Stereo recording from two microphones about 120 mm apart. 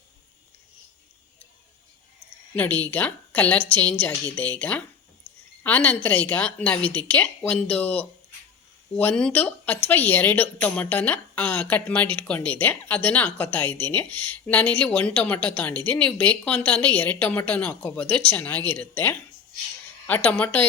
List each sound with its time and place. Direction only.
2.6 s speech: 15° left (ahead or behind)